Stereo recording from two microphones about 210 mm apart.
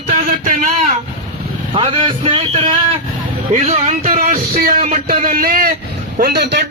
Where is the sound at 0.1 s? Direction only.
40° right (ahead or behind).